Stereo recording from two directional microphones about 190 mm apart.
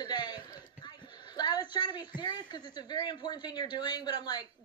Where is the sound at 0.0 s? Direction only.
20° left (ahead or behind).